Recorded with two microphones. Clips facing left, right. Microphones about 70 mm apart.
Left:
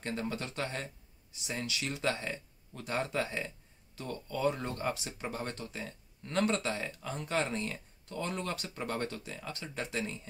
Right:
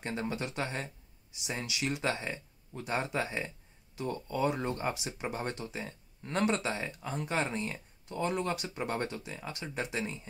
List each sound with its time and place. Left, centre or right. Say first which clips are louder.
0.0 s speech: right 1 dB; centre